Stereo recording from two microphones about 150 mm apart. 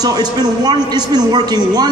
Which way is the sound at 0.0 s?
25° right (ahead or behind).